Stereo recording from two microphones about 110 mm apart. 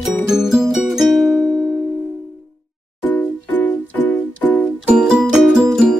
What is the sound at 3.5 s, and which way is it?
Keyboard, 15° left (ahead or behind).